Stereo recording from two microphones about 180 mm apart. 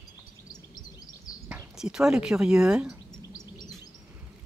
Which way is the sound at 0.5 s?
20° left (ahead or behind).